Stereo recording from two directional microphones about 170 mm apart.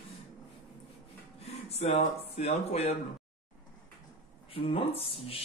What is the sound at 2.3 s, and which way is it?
Speech, 40° left (ahead or behind).